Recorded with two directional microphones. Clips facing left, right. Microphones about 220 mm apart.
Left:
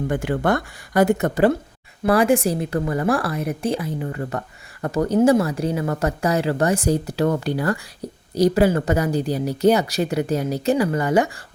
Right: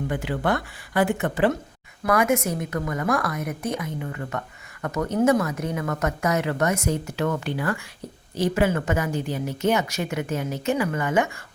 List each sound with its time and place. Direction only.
0.1 s a woman's voice: 45° left (ahead or behind)